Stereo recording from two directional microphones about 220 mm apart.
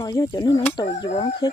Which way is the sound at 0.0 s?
15° left (ahead or behind).